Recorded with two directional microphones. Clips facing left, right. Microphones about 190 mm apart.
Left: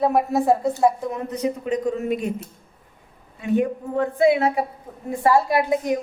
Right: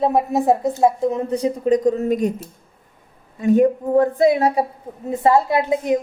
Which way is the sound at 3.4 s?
40° right (ahead or behind).